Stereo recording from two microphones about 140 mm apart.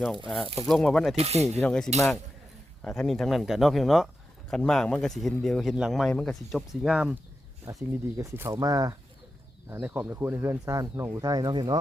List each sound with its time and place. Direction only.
0.3 s speech: centre (ahead or behind)
1.1 s speech: 50° right (ahead or behind)
1.6 s speech: 5° left (ahead or behind)
7.7 s speech: 15° right (ahead or behind)